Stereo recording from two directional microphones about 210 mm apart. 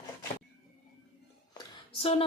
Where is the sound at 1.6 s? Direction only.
25° left (ahead or behind).